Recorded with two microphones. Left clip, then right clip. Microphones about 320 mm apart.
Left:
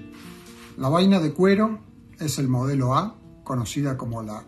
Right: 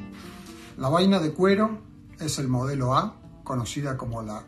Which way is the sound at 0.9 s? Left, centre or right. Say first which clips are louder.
Left 1 dB; centre.